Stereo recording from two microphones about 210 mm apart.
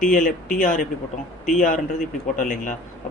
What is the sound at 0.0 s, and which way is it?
Speech, 40° left (ahead or behind).